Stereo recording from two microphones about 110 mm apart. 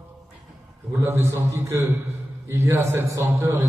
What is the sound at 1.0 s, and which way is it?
A man's voice, 25° right (ahead or behind).